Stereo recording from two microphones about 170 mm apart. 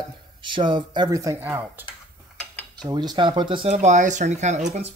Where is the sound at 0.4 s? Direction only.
30° right (ahead or behind); by 1.9 s 10° right (ahead or behind).